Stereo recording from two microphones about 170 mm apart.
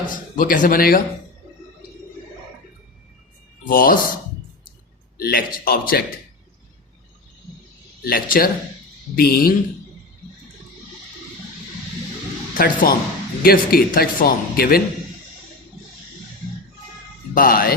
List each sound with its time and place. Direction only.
0.0 s a man's voice: 50° left (ahead or behind)
3.6 s speech: 55° left (ahead or behind)
5.1 s speech: 60° left (ahead or behind)
8.0 s speech: 60° left (ahead or behind)
12.5 s speech: 55° left (ahead or behind)
17.3 s speech: 55° left (ahead or behind)